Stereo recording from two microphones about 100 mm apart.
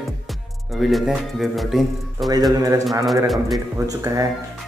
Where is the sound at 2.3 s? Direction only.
40° right (ahead or behind).